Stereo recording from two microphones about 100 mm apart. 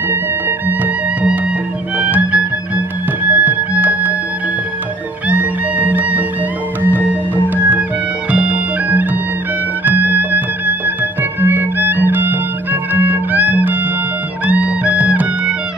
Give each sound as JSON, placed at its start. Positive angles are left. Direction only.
{"t": 2.0, "sound": "music", "side_deg": -15}
{"t": 5.3, "sound": "music", "side_deg": -15}